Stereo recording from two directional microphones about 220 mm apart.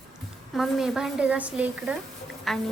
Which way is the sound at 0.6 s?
Centre (ahead or behind).